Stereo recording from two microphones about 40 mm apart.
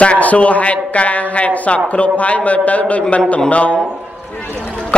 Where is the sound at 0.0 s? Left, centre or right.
Left.